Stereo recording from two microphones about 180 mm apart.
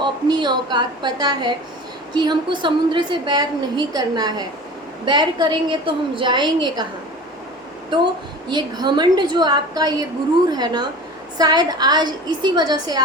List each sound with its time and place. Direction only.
0.0 s a woman's voice: 25° right (ahead or behind)
8.4 s a woman's voice: 25° right (ahead or behind)